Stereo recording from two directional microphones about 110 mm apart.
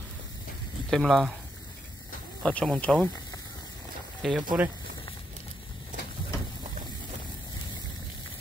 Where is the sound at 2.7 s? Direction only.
10° left (ahead or behind).